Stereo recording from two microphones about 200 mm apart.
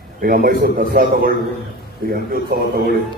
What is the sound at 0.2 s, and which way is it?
A man's voice, 45° right (ahead or behind).